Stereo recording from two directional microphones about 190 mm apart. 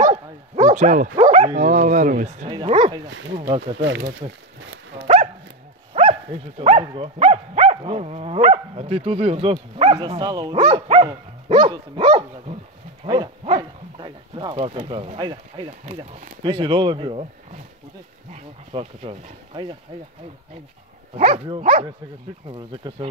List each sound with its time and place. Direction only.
0.0 s dog: 35° right (ahead or behind)
1.3 s livestock: 35° right (ahead or behind)
2.5 s speech: 25° right (ahead or behind)
3.1 s speech: 75° right (ahead or behind)
3.3 s livestock: 30° right (ahead or behind)
3.7 s speech: 70° right (ahead or behind)
5.0 s dog: 35° right (ahead or behind)
6.6 s livestock: 30° right (ahead or behind)
9.9 s speech: 20° right (ahead or behind)
15.8 s livestock: 35° right (ahead or behind)
16.4 s speech: 25° right (ahead or behind)
18.3 s speech: 30° right (ahead or behind)
21.2 s livestock: 35° right (ahead or behind)
22.5 s speech: 25° right (ahead or behind)